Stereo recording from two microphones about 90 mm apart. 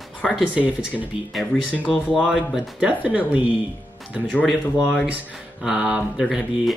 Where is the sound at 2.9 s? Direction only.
15° right (ahead or behind).